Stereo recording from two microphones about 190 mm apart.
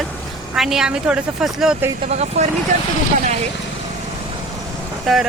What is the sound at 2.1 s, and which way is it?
Speech, 35° right (ahead or behind).